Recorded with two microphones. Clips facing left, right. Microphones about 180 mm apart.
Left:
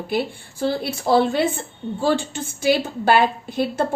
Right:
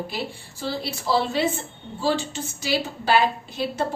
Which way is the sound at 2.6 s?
50° left (ahead or behind).